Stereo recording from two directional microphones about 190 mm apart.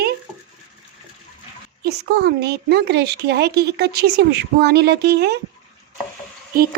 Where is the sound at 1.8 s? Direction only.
60° right (ahead or behind).